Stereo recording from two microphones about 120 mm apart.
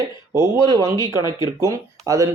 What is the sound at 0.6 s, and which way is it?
Speech, 35° right (ahead or behind).